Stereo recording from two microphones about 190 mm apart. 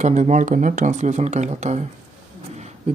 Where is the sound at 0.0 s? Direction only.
40° right (ahead or behind).